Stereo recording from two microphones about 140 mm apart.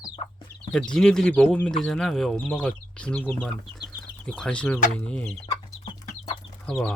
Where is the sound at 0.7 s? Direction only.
5° left (ahead or behind).